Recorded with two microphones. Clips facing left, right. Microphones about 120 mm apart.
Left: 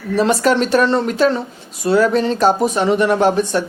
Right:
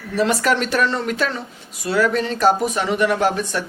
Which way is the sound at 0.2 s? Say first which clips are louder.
Left 4 dB; 30° left (ahead or behind).